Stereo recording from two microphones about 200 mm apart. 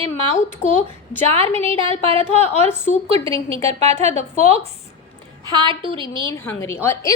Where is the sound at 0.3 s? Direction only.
40° left (ahead or behind).